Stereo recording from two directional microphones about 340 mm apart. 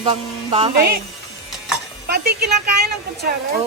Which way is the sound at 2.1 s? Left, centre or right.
Right.